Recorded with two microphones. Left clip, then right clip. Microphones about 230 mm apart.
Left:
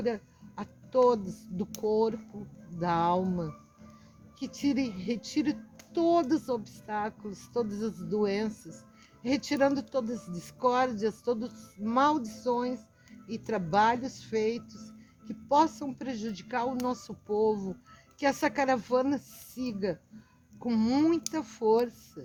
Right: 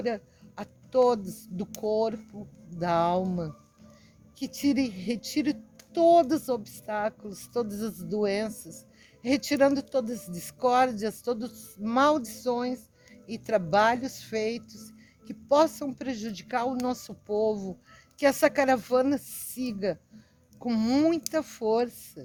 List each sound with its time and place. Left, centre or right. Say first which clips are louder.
0.0 s speech: right 1 dB; right